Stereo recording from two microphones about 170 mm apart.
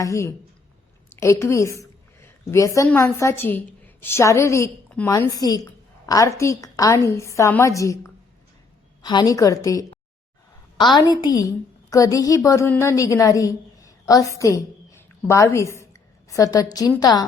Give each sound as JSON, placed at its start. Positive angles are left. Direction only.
{"t": 0.0, "sound": "a woman's voice", "side_deg": 20}